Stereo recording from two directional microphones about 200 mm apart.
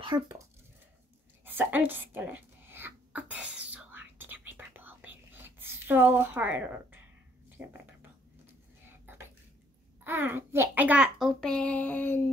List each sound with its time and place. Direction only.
0.0 s speech: 20° right (ahead or behind)
1.4 s a sound: 10° right (ahead or behind)
3.7 s whispering: 10° right (ahead or behind)
7.6 s speech: 5° right (ahead or behind)
8.8 s whispering: 10° right (ahead or behind)
10.0 s a child's voice: 10° right (ahead or behind); by 12.3 s 10° left (ahead or behind)